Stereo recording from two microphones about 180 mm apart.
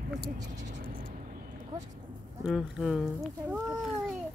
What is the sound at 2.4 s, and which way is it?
Speech, centre (ahead or behind).